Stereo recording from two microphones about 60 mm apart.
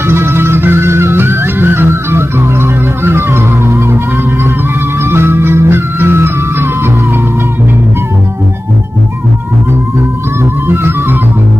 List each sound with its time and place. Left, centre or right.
0.1 s music: right
5.0 s music: right